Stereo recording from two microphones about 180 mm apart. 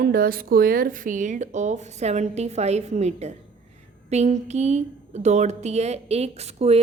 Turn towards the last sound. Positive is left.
turn(degrees=-35)  # may be behind; listen again after turning